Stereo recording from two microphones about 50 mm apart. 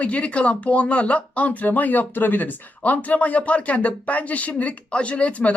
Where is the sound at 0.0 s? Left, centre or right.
Left.